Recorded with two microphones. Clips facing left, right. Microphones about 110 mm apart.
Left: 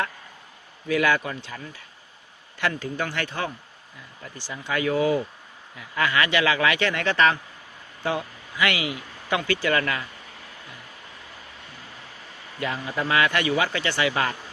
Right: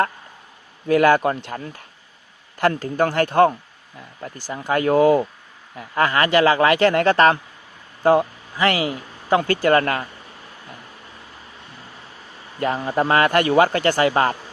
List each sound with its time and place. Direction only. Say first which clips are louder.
0.9 s a man's voice: right 7 dB; 45° right (ahead or behind)
12.5 s a man's voice: right 7 dB; 40° right (ahead or behind)